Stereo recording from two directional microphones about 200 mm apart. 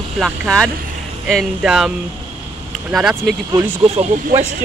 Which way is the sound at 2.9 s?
5° right (ahead or behind).